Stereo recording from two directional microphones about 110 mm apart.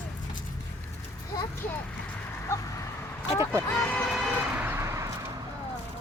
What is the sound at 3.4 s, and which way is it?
Vehicle, 25° right (ahead or behind).